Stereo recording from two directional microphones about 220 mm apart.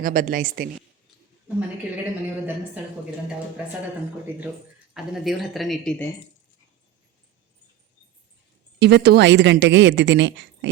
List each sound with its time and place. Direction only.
0.0 s a woman's voice: 40° right (ahead or behind)
5.1 s speech: centre (ahead or behind)
8.8 s speech: 50° right (ahead or behind)